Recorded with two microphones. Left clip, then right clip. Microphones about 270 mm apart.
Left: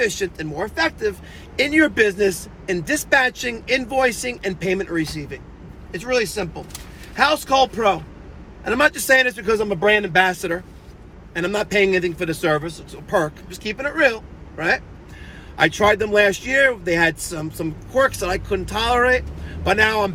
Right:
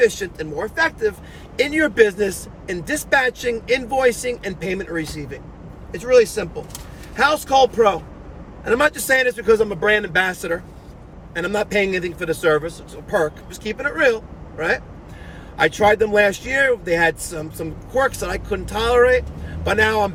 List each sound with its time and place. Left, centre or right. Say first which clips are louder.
0.0 s speech: right 4 dB; centre
15.5 s speech: right 1 dB; centre